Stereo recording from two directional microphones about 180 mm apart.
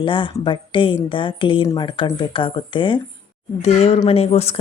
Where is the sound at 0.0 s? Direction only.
30° left (ahead or behind).